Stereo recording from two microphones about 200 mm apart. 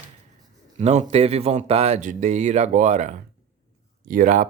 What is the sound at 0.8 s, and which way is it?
A man's voice, 35° right (ahead or behind).